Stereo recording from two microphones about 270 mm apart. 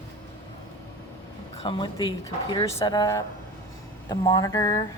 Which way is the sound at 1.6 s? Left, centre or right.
Centre.